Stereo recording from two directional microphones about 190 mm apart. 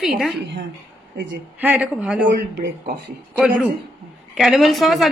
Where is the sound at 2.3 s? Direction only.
55° right (ahead or behind).